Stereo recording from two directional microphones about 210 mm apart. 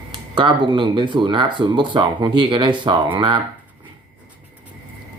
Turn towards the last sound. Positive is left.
turn(degrees=-20)  # may be behind; listen again after turning